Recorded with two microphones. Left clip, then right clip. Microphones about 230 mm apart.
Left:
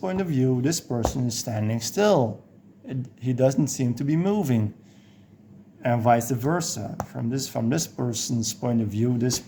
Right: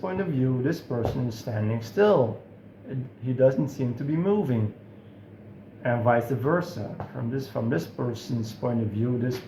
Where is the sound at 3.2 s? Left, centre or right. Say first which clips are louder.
Right 1 dB; left.